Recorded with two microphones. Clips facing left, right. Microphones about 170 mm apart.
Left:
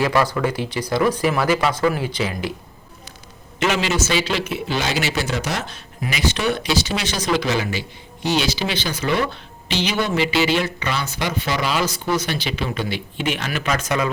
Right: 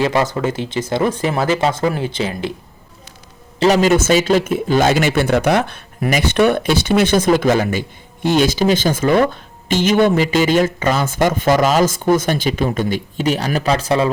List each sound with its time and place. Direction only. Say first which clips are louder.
0.0 s speech: right 2 dB; 20° right (ahead or behind)
3.6 s a man's voice: right 8 dB; 40° right (ahead or behind)